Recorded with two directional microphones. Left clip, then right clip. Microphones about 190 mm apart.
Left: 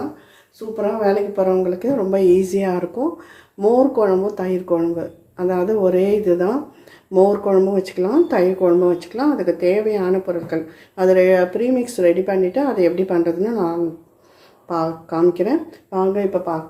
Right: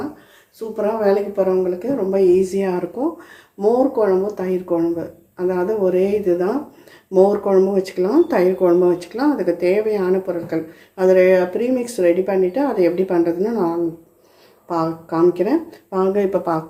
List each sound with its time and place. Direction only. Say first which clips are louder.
0.8 s speech: right 1 dB; 5° right (ahead or behind)
1.5 s speech: left 1 dB; 15° left (ahead or behind)
3.0 s speech: even; 5° left (ahead or behind)
7.1 s speech: even; centre (ahead or behind)